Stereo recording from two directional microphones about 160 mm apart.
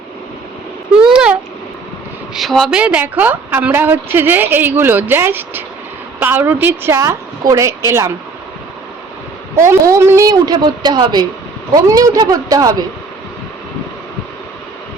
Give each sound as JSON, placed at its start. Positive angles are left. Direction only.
{"t": 1.1, "sound": "babbling", "side_deg": -5}
{"t": 2.3, "sound": "a woman's voice", "side_deg": 0}
{"t": 9.6, "sound": "a woman's voice", "side_deg": -20}